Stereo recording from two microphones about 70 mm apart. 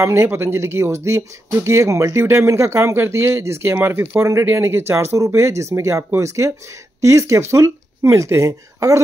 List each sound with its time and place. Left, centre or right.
0.0 s speech: right